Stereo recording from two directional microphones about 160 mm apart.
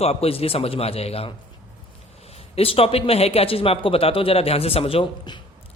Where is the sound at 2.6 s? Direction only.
35° left (ahead or behind).